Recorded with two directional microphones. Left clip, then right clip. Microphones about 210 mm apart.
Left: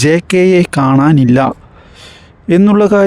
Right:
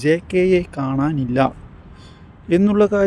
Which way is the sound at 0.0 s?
50° left (ahead or behind).